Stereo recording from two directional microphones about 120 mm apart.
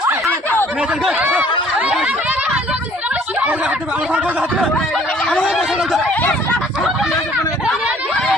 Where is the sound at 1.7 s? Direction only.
5° right (ahead or behind).